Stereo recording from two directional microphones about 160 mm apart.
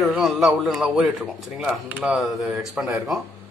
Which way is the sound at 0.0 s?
Centre (ahead or behind).